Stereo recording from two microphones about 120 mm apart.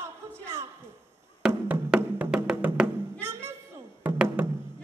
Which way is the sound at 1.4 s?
5° right (ahead or behind).